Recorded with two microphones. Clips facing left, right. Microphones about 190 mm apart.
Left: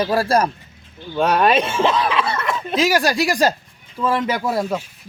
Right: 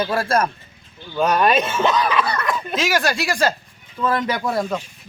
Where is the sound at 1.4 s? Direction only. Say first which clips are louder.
Left 1 dB; 30° left (ahead or behind).